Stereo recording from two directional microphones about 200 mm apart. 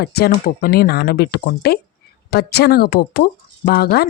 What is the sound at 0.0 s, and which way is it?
Speech, 50° left (ahead or behind).